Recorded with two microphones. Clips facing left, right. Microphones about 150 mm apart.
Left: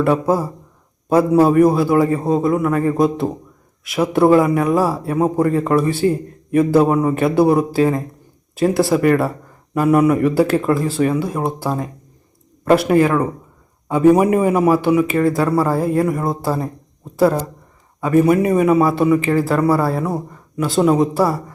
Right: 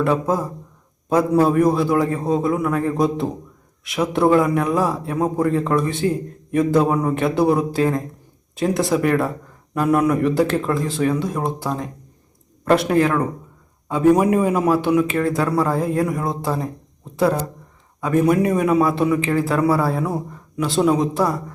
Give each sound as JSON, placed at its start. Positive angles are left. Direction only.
{"t": 0.0, "sound": "a man's voice", "side_deg": 5}